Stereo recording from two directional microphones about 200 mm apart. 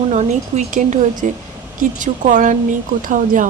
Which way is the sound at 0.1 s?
35° right (ahead or behind).